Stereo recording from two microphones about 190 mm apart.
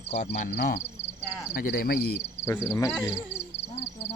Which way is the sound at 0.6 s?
55° left (ahead or behind).